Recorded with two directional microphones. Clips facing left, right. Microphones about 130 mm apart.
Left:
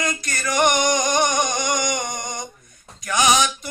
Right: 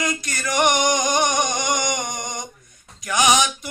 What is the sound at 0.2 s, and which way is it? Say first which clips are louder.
Music: left 2 dB; 15° right (ahead or behind).